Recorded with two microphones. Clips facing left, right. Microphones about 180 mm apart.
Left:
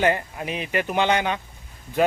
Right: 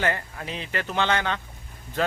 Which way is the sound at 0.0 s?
15° left (ahead or behind).